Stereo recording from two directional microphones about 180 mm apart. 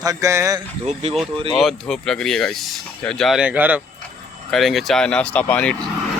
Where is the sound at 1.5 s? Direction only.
Centre (ahead or behind).